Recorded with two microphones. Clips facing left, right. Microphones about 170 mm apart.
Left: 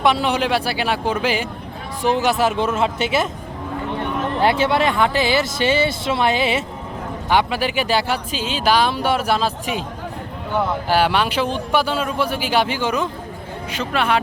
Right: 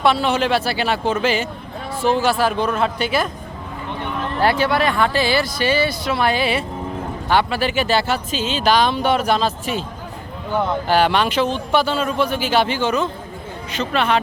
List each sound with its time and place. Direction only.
0.0 s speech: 15° left (ahead or behind)
4.4 s speech: 20° left (ahead or behind)
10.8 s speech: 10° left (ahead or behind)